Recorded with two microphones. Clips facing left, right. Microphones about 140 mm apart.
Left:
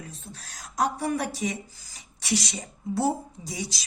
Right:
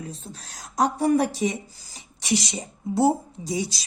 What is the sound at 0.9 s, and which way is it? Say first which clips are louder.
A woman's voice: right 7 dB; 30° right (ahead or behind).